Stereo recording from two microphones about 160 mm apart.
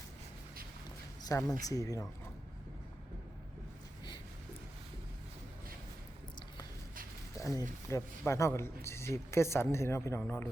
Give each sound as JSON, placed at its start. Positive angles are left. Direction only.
{"t": 1.3, "sound": "speech", "side_deg": 20}
{"t": 7.3, "sound": "a sound", "side_deg": 20}
{"t": 7.9, "sound": "speech", "side_deg": 15}